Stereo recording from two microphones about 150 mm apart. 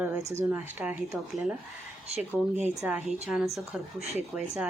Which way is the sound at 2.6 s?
10° right (ahead or behind).